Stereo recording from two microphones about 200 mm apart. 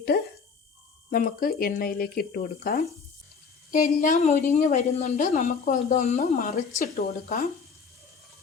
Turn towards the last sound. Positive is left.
turn(degrees=45)  # may be behind; listen again after turning